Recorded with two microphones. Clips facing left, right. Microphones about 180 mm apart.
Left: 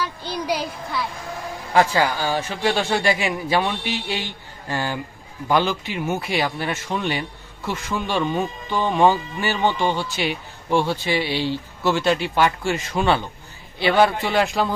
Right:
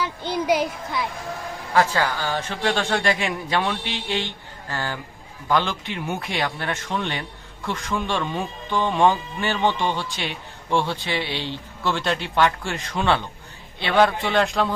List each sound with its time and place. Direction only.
0.0 s a child's voice: 20° right (ahead or behind)
1.7 s a man's voice: 15° left (ahead or behind)